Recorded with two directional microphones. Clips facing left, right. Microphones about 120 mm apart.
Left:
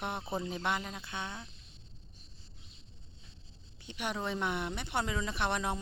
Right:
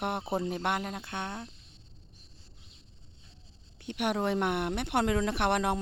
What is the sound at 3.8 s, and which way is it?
Speech, 65° right (ahead or behind).